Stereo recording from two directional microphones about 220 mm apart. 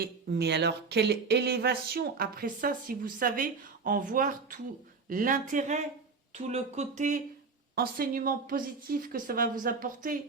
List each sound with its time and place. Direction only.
0.0 s a woman's voice: 45° right (ahead or behind)